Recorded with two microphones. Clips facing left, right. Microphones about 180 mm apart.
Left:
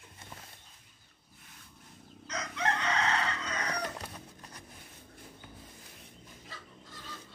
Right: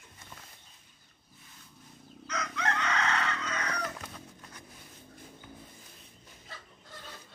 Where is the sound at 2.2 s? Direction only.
30° left (ahead or behind).